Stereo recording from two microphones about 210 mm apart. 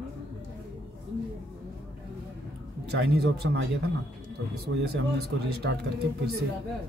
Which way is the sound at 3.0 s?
50° right (ahead or behind).